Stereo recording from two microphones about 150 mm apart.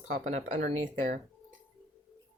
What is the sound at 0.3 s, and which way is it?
Speech, 50° right (ahead or behind).